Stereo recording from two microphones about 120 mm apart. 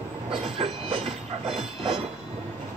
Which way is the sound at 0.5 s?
55° right (ahead or behind).